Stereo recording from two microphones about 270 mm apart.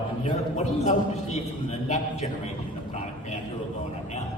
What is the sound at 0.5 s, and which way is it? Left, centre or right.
Speech, left.